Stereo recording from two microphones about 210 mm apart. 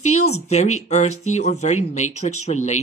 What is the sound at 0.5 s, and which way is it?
Speech, 35° left (ahead or behind).